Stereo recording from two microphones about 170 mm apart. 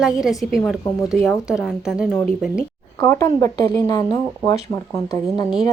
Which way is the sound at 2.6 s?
15° left (ahead or behind).